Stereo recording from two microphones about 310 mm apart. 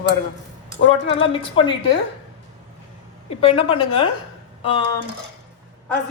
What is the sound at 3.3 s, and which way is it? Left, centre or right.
Speech, centre.